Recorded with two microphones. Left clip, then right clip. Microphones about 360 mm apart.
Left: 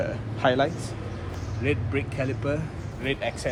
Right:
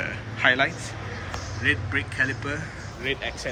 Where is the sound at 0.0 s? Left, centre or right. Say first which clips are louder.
Right 2 dB; centre.